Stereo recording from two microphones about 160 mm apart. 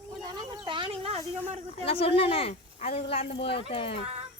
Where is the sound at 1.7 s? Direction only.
35° left (ahead or behind).